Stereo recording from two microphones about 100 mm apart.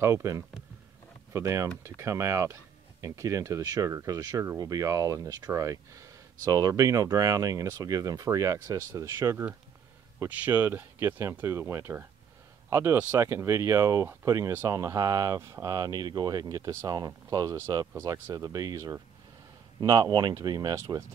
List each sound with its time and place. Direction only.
0.0 s speech: 30° right (ahead or behind)
10.1 s speech: 20° right (ahead or behind); by 17.6 s 40° right (ahead or behind)
17.6 s speech: 25° right (ahead or behind)
19.8 s speech: 40° right (ahead or behind)